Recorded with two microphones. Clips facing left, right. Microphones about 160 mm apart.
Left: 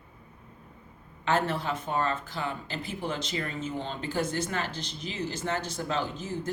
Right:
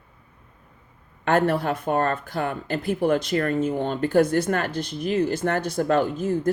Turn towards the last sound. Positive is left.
turn(degrees=-55)  # may be behind; listen again after turning